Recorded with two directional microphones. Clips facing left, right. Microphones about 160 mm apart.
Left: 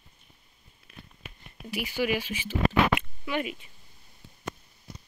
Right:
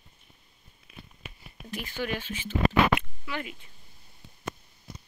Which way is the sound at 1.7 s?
10° left (ahead or behind).